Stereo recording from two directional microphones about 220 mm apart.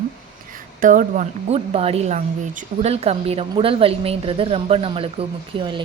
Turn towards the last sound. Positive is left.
turn(degrees=-20)  # may be behind; listen again after turning